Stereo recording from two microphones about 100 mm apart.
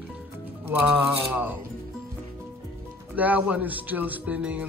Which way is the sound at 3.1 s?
15° right (ahead or behind).